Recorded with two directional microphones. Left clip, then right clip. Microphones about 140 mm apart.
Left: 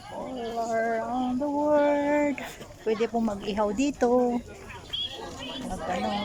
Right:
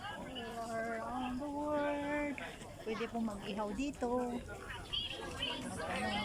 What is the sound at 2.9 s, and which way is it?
Speech, 55° left (ahead or behind).